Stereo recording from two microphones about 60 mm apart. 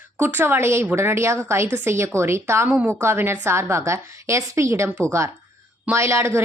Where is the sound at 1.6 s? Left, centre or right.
Right.